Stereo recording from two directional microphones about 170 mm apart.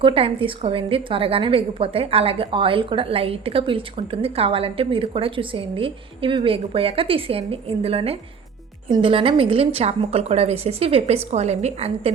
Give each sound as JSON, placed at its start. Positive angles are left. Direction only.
{"t": 0.0, "sound": "a woman's voice", "side_deg": -35}